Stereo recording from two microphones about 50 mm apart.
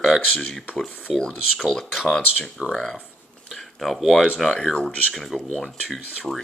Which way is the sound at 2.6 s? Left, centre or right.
Right.